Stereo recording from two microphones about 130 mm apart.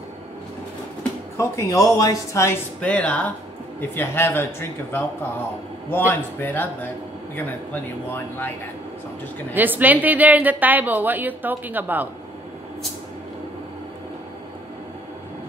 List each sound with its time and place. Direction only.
1.3 s a man's voice: 20° left (ahead or behind)
2.8 s a man's voice: 10° left (ahead or behind)
9.5 s speech: 15° right (ahead or behind)